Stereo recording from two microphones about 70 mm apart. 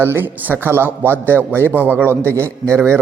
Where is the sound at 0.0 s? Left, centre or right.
Right.